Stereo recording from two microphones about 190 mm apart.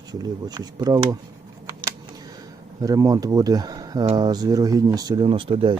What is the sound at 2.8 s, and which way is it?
Speech, 20° right (ahead or behind).